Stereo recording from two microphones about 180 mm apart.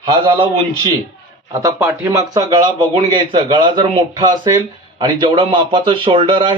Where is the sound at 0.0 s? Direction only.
30° right (ahead or behind).